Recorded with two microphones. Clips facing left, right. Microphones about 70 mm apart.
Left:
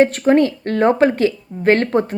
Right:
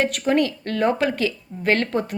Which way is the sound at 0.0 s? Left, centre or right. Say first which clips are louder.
Left 7 dB; left.